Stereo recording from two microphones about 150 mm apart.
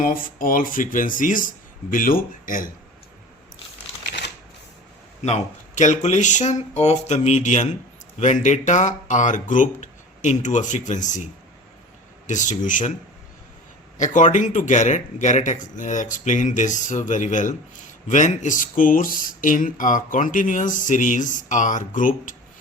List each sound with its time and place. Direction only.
0.0 s speech: 65° left (ahead or behind)
5.2 s speech: 50° left (ahead or behind)
12.3 s speech: 55° left (ahead or behind)
14.0 s speech: 55° left (ahead or behind)